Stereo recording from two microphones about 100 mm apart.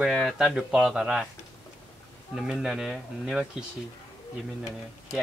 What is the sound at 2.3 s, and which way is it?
Speech, 5° right (ahead or behind).